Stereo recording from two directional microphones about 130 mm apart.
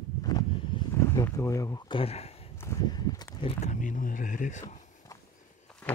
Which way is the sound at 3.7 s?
80° left.